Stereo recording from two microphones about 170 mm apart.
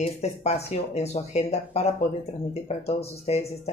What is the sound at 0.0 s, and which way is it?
Speech, 40° left (ahead or behind).